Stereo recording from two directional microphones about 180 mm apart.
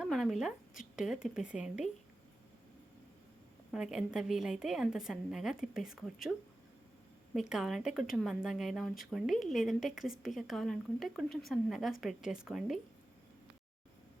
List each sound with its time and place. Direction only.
0.0 s a woman's voice: centre (ahead or behind)
3.7 s a woman's voice: 5° right (ahead or behind)
7.3 s a woman's voice: centre (ahead or behind)